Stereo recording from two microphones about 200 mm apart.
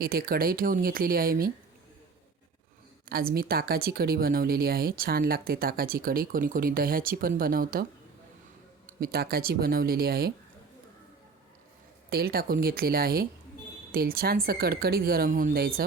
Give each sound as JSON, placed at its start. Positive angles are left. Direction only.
{"t": 0.0, "sound": "speech", "side_deg": -50}
{"t": 3.1, "sound": "speech", "side_deg": -45}
{"t": 9.0, "sound": "speech", "side_deg": -50}
{"t": 12.1, "sound": "speech", "side_deg": -50}